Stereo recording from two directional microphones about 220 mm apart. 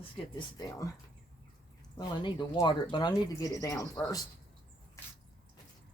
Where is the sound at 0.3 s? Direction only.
20° left (ahead or behind).